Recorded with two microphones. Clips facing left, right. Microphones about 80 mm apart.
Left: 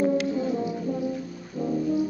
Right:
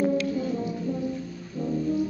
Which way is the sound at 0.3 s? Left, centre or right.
Centre.